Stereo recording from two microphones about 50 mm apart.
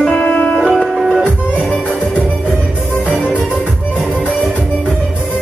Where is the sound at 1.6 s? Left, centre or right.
Left.